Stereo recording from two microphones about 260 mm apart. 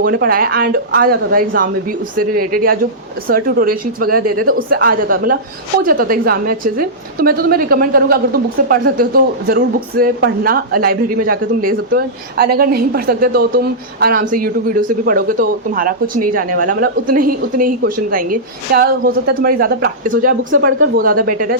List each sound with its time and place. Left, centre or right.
0.0 s a woman's voice: right